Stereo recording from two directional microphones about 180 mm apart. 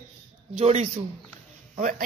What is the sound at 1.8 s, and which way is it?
Speech, 50° right (ahead or behind).